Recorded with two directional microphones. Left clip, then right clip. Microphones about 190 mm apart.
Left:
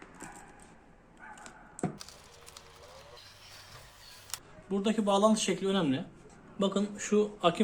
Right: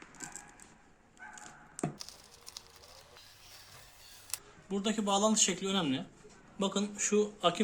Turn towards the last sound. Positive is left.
turn(degrees=0)  # may be behind; listen again after turning